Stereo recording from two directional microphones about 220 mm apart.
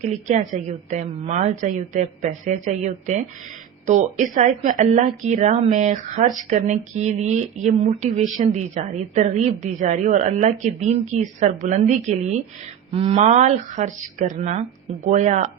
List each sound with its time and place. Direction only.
0.0 s speech: 30° right (ahead or behind)